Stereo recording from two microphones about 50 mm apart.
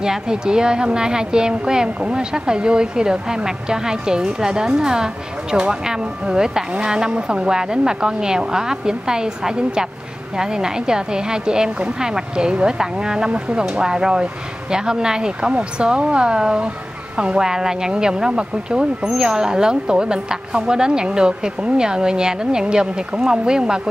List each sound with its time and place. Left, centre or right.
0.0 s a woman's voice: centre